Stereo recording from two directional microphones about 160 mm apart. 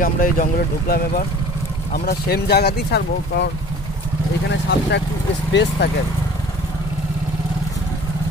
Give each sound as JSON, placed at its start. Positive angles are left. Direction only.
{"t": 0.0, "sound": "speech", "side_deg": 60}
{"t": 4.5, "sound": "speech", "side_deg": 90}